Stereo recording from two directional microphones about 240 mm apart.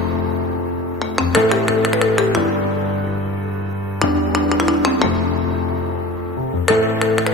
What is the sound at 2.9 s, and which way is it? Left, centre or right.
Music, right.